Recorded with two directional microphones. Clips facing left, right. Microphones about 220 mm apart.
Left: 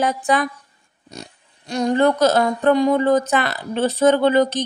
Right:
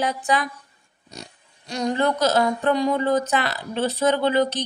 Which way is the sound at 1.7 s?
50° left (ahead or behind).